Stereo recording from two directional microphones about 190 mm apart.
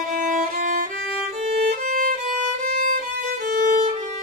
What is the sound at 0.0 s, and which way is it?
Violin, 45° right (ahead or behind).